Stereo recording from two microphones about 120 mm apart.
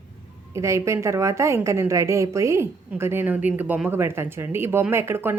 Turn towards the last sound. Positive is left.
turn(degrees=-20)  # may be behind; listen again after turning